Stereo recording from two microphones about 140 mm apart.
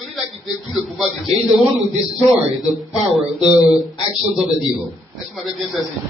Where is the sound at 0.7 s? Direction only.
Centre (ahead or behind).